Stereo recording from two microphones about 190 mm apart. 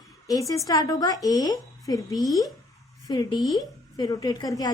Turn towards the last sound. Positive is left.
turn(degrees=20)  # may be behind; listen again after turning